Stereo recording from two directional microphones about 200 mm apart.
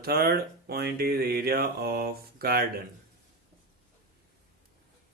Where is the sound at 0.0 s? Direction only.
50° right (ahead or behind).